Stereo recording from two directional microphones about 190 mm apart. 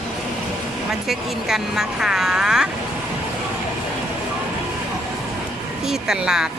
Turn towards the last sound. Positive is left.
turn(degrees=-5)  # may be behind; listen again after turning